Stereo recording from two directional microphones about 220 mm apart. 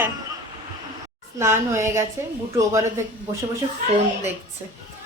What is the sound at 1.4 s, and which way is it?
A woman's voice, 10° right (ahead or behind).